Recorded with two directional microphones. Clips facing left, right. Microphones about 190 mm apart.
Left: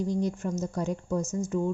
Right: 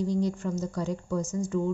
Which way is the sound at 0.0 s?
50° left (ahead or behind).